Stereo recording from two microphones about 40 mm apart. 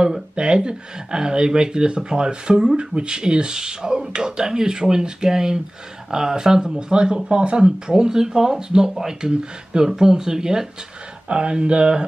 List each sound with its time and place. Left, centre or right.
0.4 s speech: right
11.2 s speech: right